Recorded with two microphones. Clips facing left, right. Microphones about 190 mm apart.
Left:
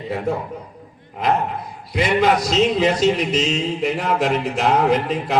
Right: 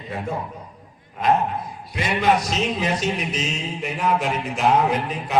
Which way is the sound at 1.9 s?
75° left (ahead or behind).